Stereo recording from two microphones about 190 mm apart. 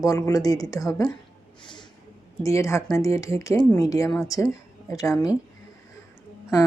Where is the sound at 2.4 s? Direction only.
15° left (ahead or behind).